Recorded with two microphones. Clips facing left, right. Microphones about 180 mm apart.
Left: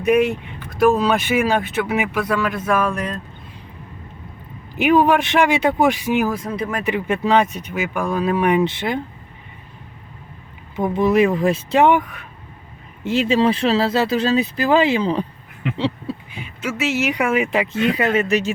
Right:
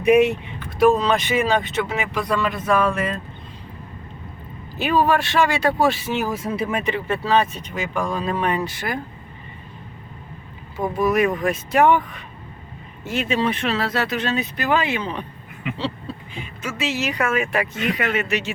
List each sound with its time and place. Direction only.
0.8 s speech: 5° left (ahead or behind)
4.8 s speech: 15° left (ahead or behind)
6.3 s speech: 5° right (ahead or behind)
6.8 s speech: 15° left (ahead or behind)
10.8 s speech: 20° left (ahead or behind)
13.1 s speech: 30° left (ahead or behind)
16.6 s speech: 10° left (ahead or behind); by 18.5 s 40° left (ahead or behind)